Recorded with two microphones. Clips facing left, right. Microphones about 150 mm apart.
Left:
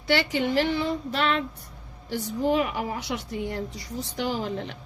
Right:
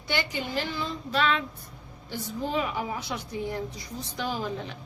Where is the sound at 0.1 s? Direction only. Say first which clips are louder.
Left 6 dB; 70° left (ahead or behind).